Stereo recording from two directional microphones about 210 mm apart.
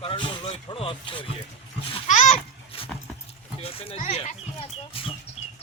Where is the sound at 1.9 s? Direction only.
35° left (ahead or behind).